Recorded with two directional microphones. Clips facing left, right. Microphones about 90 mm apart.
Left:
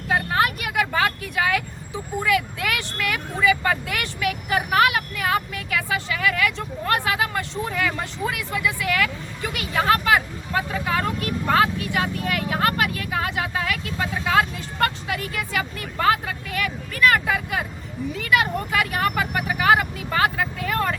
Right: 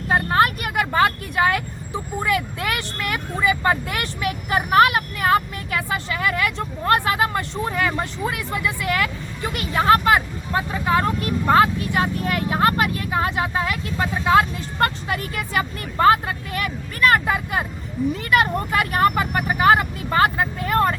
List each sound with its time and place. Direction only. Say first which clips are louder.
0.1 s vehicle: right 3 dB; 40° right (ahead or behind)